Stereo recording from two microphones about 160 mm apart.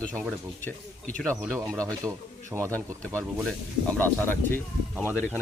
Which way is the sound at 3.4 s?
10° left (ahead or behind).